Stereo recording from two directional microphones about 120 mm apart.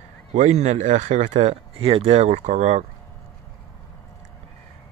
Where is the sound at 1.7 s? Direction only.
50° right (ahead or behind); by 2.8 s 70° right (ahead or behind).